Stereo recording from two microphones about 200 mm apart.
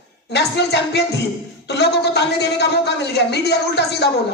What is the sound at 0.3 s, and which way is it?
Speech, 55° left (ahead or behind).